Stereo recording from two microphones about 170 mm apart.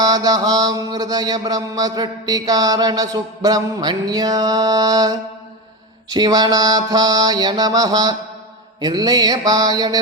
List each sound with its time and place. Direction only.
0.0 s mantra: 20° right (ahead or behind)